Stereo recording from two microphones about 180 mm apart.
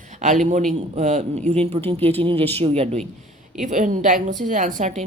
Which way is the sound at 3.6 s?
45° right (ahead or behind).